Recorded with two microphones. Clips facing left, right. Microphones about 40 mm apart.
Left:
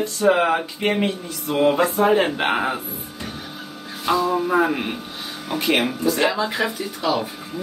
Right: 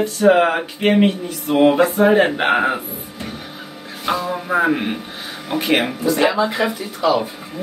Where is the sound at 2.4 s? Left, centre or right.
Right.